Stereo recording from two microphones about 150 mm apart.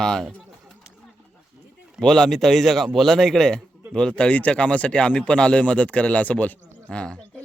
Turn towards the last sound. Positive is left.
turn(degrees=5)  # may be behind; listen again after turning